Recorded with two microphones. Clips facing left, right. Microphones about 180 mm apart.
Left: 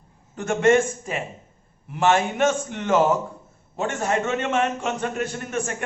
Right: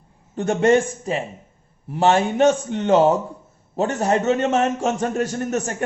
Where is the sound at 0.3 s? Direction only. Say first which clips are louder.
Right 2 dB; 35° right (ahead or behind).